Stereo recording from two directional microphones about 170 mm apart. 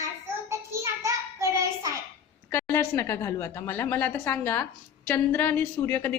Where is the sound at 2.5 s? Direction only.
15° left (ahead or behind).